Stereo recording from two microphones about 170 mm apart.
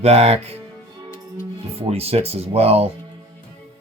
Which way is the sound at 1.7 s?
35° right (ahead or behind).